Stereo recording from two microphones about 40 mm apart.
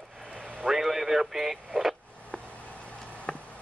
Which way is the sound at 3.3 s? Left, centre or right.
Left.